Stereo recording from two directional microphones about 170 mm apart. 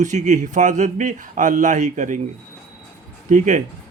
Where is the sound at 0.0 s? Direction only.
45° right (ahead or behind).